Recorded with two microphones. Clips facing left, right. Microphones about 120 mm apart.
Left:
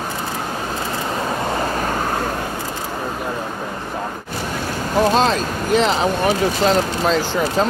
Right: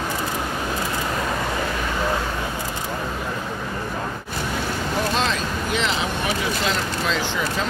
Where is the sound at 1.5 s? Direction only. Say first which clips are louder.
Left 4 dB; 40° left (ahead or behind).